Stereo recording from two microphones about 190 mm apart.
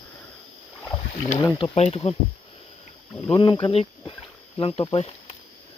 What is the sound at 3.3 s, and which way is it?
Speech, 25° left (ahead or behind).